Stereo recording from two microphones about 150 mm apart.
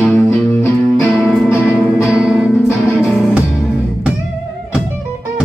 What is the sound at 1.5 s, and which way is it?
Music, 15° left (ahead or behind).